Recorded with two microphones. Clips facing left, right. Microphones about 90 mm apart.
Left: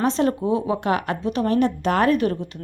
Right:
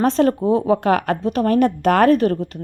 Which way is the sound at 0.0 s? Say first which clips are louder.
Right 4 dB; 45° right (ahead or behind).